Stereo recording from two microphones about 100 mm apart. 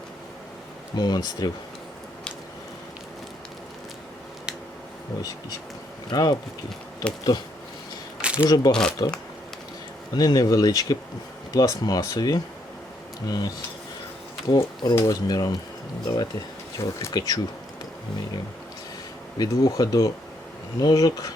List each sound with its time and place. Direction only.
0.9 s speech: 45° left (ahead or behind)
6.1 s speech: 40° left (ahead or behind)
7.0 s speech: 10° left (ahead or behind)
8.2 s a sound: 10° right (ahead or behind)
8.4 s speech: 40° left (ahead or behind)
10.2 s speech: 40° left (ahead or behind)
14.6 s speech: 50° left (ahead or behind)
14.9 s speech: 35° left (ahead or behind)
19.4 s speech: 40° left (ahead or behind)